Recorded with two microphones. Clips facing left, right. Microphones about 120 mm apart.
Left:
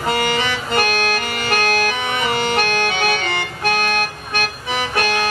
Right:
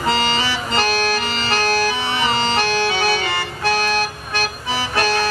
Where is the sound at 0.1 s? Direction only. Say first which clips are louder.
Left 1 dB; 55° left (ahead or behind).